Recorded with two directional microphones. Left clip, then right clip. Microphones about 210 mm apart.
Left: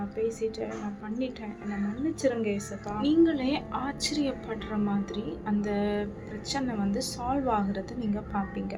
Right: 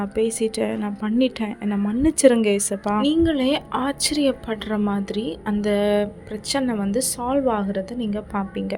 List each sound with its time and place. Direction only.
0.0 s a woman's voice: 30° right (ahead or behind)